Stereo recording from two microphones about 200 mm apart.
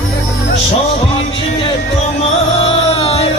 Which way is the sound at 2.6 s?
30° left (ahead or behind).